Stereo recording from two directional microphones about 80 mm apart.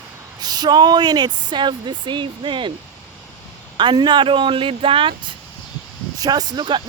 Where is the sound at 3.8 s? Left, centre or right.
Right.